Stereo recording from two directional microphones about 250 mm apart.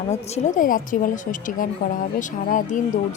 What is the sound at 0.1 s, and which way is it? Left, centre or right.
A woman's voice, left.